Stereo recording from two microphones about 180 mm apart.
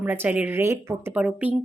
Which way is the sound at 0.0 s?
10° right (ahead or behind).